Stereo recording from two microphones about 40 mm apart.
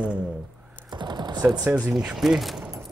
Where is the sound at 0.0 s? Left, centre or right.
Right.